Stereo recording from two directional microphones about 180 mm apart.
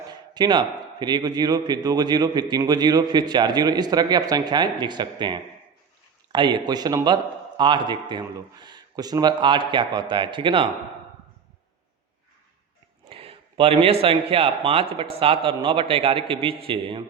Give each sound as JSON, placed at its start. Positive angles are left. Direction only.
{"t": 0.1, "sound": "a man's voice", "side_deg": -25}
{"t": 13.1, "sound": "a sound", "side_deg": -30}
{"t": 14.0, "sound": "a man's voice", "side_deg": -30}